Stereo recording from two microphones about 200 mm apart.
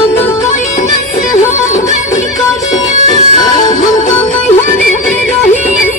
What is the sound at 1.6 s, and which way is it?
Music, 15° left (ahead or behind).